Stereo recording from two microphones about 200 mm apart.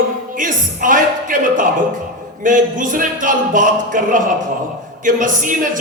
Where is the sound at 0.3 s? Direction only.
40° right (ahead or behind).